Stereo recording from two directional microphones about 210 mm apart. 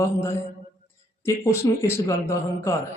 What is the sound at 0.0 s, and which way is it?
A man's voice, 15° left (ahead or behind).